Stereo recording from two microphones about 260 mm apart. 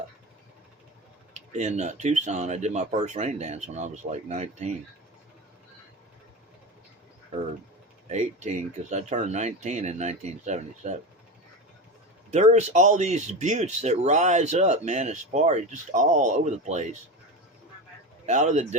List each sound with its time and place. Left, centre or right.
1.3 s speech: right
8.1 s speech: right
12.3 s speech: right
18.3 s speech: right